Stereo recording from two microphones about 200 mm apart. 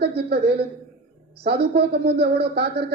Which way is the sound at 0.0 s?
55° right (ahead or behind).